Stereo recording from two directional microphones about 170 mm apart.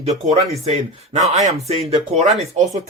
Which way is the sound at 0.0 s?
40° right (ahead or behind).